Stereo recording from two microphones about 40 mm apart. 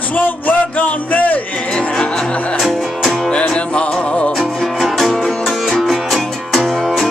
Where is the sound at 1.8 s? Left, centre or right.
Centre.